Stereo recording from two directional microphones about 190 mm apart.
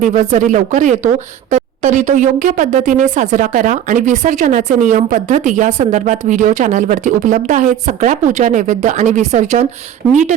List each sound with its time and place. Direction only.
0.0 s a woman's voice: 35° right (ahead or behind)